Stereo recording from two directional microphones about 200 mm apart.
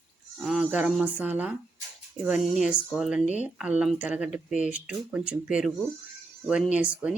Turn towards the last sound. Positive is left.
turn(degrees=-5)  # may be behind; listen again after turning